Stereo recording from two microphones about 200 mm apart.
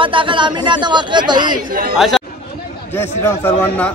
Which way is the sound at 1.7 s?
45° right (ahead or behind).